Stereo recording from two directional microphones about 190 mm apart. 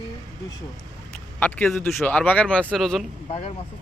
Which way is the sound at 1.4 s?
10° left (ahead or behind).